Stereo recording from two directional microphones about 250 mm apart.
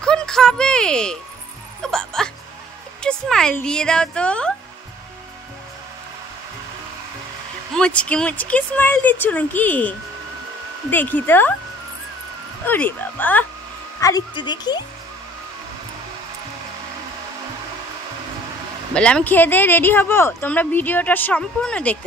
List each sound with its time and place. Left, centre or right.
0.0 s a sound: centre
1.8 s music: centre
3.0 s speech: centre
7.7 s speech: centre
12.6 s speech: centre
18.9 s speech: centre